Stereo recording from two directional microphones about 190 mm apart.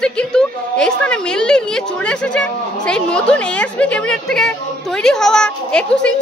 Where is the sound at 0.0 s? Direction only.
5° left (ahead or behind).